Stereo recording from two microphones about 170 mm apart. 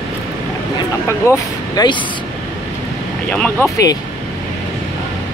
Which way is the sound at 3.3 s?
5° left (ahead or behind).